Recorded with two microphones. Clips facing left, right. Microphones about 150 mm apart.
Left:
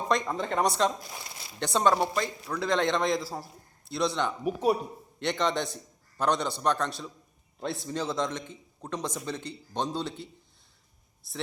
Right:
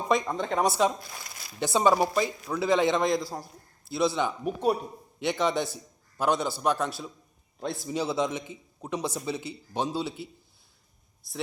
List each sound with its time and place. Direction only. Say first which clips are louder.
0.1 s a man's voice: right 2 dB; centre (ahead or behind)
1.0 s speech: left 1 dB; 20° left (ahead or behind)
1.5 s a man's voice: right 2 dB; 5° right (ahead or behind)
11.2 s a man's voice: right 1 dB; centre (ahead or behind)